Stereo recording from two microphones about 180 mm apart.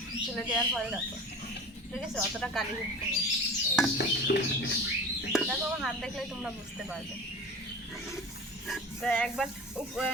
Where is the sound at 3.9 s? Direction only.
65° left (ahead or behind).